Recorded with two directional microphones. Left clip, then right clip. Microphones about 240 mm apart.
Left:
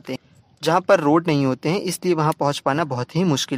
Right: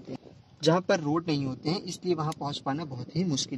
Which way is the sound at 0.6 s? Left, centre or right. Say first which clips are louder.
Left 9 dB; left.